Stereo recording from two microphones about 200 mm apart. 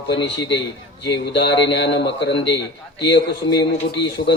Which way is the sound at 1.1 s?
60° left (ahead or behind).